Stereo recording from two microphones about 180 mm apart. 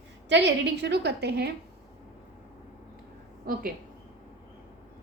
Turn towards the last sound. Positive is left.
turn(degrees=-55)  # may be behind; listen again after turning